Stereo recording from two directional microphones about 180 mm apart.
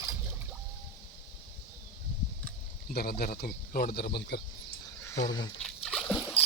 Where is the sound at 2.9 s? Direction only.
60° left (ahead or behind).